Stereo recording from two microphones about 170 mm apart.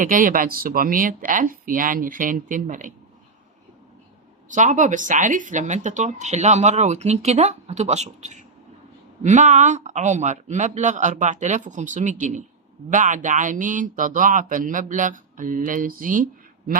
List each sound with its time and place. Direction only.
0.0 s speech: 50° right (ahead or behind)
4.4 s speech: 45° right (ahead or behind)